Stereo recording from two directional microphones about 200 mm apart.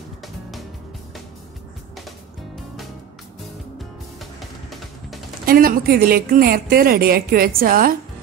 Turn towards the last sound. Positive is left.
turn(degrees=-45)  # may be behind; listen again after turning